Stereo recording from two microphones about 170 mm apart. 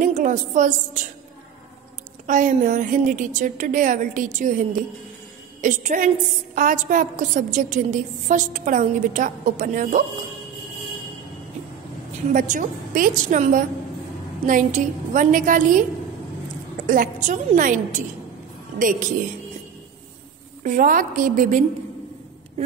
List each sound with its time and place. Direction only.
0.0 s a woman's voice: 50° right (ahead or behind)
2.2 s a woman's voice: 50° right (ahead or behind)
12.3 s a woman's voice: 50° right (ahead or behind)
20.6 s a woman's voice: 55° right (ahead or behind)